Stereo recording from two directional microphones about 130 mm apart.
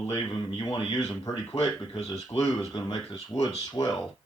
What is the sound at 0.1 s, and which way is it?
A man's voice, 40° left (ahead or behind).